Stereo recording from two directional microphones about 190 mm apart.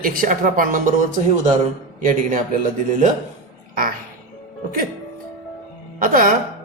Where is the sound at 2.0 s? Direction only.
45° right (ahead or behind).